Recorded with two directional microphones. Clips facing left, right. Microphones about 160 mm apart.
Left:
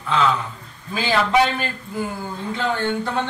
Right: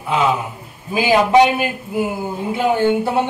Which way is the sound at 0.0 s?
15° right (ahead or behind).